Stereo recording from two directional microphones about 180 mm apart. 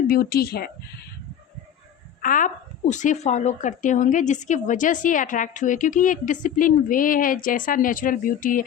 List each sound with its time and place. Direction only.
0.1 s speech: 60° left (ahead or behind)
2.2 s a woman's voice: 45° left (ahead or behind)